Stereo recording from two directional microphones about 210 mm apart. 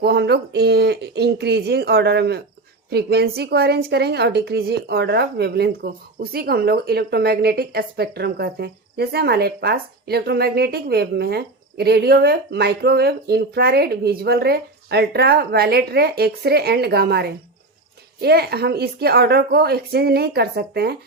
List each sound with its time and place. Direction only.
0.0 s speech: 50° right (ahead or behind)